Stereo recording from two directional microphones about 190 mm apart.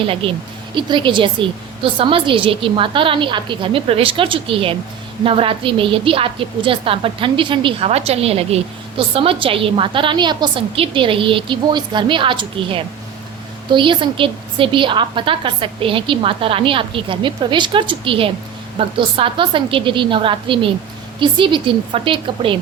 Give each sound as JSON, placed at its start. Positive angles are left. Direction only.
{"t": 0.0, "sound": "a woman's voice", "side_deg": -30}